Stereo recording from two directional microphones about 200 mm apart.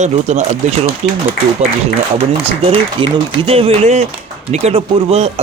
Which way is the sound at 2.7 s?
25° right (ahead or behind).